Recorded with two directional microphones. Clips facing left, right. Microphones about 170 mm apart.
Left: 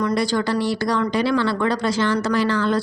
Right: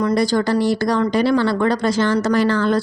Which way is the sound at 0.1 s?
40° right (ahead or behind).